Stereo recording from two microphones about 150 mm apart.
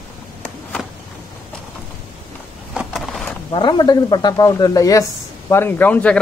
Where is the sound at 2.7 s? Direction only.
Centre (ahead or behind).